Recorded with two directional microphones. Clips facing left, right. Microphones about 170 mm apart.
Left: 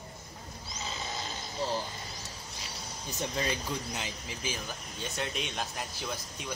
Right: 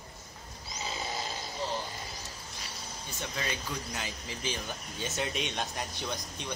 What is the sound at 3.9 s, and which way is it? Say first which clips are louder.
Speech: even; 20° left (ahead or behind).